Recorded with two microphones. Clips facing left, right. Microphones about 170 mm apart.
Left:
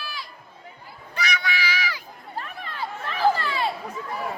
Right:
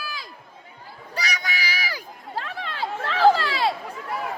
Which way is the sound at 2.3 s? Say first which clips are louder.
Right 3 dB; 90° right.